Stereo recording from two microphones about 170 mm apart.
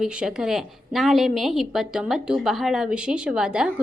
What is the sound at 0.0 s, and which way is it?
A woman's voice, 5° right (ahead or behind).